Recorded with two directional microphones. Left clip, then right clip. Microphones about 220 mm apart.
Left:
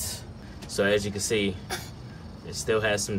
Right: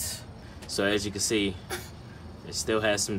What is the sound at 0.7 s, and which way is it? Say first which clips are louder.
Speech: left 3 dB; 10° right (ahead or behind).